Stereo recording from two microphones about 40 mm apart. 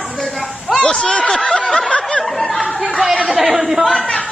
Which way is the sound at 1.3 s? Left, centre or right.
Centre.